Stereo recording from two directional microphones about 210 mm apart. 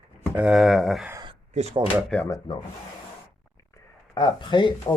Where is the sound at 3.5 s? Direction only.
20° left (ahead or behind).